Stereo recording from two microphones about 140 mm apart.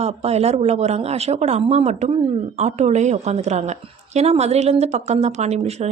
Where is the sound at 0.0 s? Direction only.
50° right (ahead or behind).